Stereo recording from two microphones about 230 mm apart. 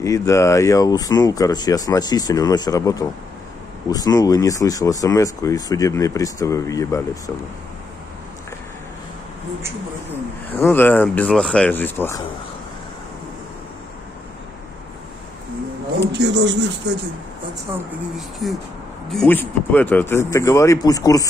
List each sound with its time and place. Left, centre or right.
0.0 s speech: centre
10.0 s speech: centre
16.1 s speech: right
18.4 s speech: centre